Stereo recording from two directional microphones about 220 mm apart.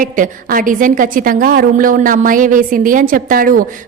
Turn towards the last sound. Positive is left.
turn(degrees=-40)  # may be behind; listen again after turning